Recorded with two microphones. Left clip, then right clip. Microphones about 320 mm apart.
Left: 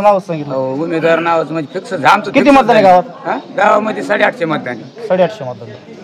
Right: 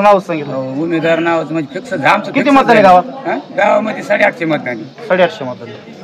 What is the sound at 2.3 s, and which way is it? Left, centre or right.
Speech, left.